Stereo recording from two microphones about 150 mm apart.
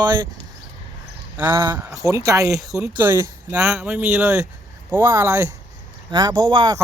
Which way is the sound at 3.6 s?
5° right (ahead or behind).